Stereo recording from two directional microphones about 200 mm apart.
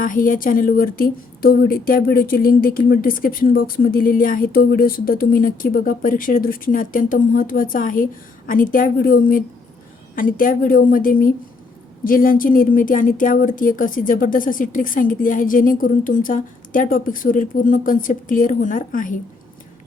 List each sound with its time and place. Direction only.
0.0 s speech: 45° left (ahead or behind)